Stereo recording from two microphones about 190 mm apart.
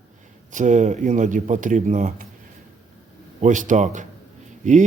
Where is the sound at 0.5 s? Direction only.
40° right (ahead or behind).